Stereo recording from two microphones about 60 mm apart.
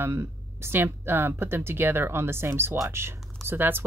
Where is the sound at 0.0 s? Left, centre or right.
Right.